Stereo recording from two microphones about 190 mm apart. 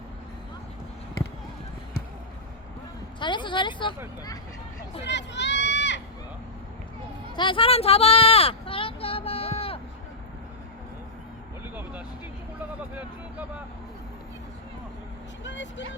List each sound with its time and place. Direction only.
3.2 s speech: 25° left (ahead or behind)
5.0 s run: 65° left (ahead or behind)
7.3 s a sound: 25° left (ahead or behind)
11.7 s vehicle: 10° right (ahead or behind)
15.4 s speech: 75° left (ahead or behind)